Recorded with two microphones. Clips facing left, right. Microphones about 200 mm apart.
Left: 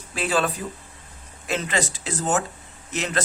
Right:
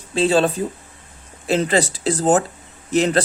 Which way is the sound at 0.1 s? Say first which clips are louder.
Right 7 dB; 25° right (ahead or behind).